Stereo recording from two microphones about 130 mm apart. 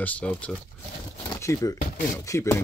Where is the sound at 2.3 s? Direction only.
20° left (ahead or behind).